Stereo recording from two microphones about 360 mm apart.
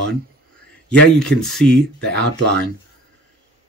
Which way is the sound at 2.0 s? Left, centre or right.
Right.